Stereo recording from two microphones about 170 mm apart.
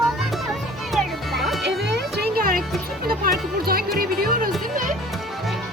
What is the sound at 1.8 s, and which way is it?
Music, 75° right (ahead or behind).